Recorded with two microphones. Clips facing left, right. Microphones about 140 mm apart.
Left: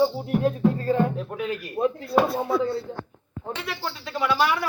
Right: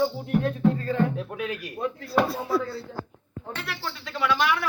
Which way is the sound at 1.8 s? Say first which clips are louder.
Left 7 dB; 25° left (ahead or behind).